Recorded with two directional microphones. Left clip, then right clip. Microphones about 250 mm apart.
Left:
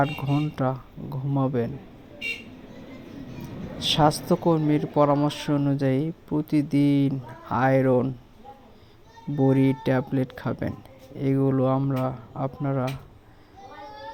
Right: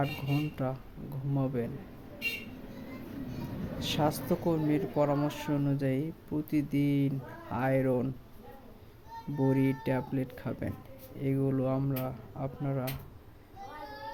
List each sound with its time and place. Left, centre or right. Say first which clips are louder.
0.0 s speech: left 8 dB; centre
3.8 s speech: left 10 dB; centre
9.4 s speech: left 8 dB; centre